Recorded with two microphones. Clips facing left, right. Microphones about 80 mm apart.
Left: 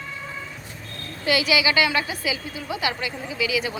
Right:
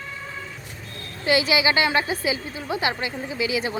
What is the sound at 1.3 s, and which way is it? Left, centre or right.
A woman's voice, right.